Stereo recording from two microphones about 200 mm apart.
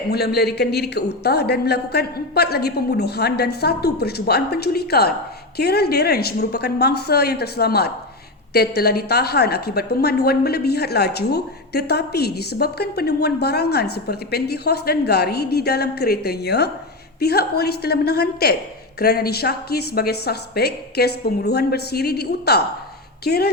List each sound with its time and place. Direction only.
0.1 s a woman's voice: 55° left (ahead or behind)